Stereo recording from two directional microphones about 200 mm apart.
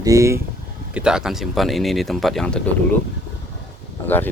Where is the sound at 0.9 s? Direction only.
5° right (ahead or behind).